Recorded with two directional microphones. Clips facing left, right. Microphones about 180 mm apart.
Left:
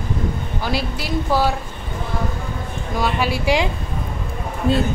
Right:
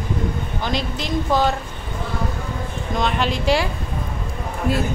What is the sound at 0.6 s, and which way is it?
Speech, 5° left (ahead or behind).